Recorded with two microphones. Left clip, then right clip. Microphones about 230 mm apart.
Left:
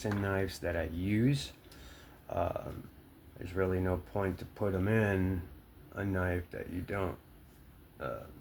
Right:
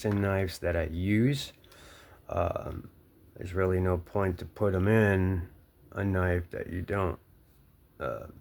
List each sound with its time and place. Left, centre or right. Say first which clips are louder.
0.0 s speech: right 4 dB; right